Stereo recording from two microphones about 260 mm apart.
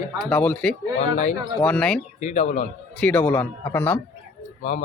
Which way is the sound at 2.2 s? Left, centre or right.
Left.